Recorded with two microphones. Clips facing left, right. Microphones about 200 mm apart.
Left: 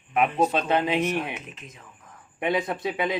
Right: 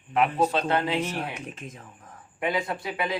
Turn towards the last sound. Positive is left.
turn(degrees=20)  # may be behind; listen again after turning